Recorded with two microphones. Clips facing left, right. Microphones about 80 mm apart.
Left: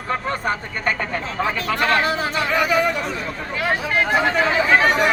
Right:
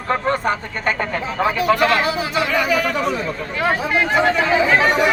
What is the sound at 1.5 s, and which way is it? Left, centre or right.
Speech, centre.